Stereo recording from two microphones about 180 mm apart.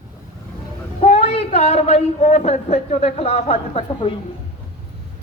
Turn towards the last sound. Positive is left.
turn(degrees=35)  # may be behind; listen again after turning